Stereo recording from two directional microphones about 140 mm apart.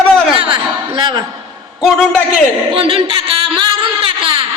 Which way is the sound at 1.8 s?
Centre (ahead or behind).